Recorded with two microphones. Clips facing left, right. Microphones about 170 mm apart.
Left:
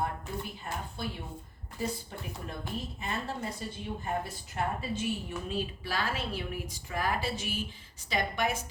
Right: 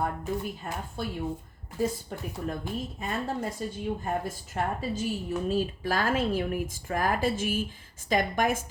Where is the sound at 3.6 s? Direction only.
45° right (ahead or behind).